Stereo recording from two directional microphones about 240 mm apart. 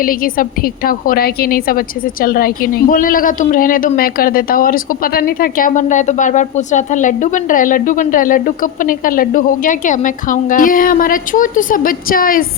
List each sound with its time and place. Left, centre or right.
0.0 s a woman's voice: left